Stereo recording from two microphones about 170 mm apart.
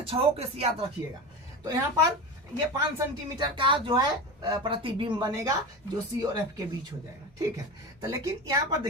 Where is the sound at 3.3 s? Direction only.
30° right (ahead or behind).